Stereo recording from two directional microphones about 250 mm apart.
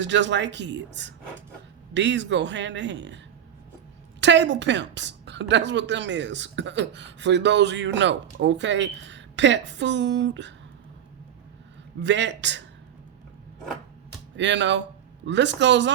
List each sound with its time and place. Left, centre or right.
0.0 s a woman's voice: right
4.2 s a woman's voice: right
11.9 s a woman's voice: right
14.3 s speech: right